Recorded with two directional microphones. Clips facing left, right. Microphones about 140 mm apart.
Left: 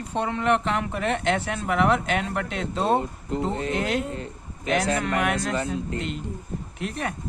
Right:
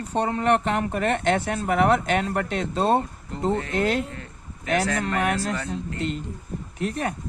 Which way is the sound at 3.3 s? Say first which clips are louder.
Right 1 dB; 20° left (ahead or behind).